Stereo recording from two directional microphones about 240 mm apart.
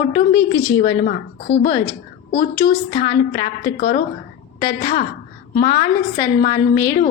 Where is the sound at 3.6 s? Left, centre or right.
Left.